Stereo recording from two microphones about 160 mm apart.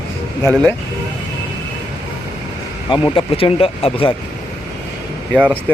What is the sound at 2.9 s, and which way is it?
Speech, 30° left (ahead or behind).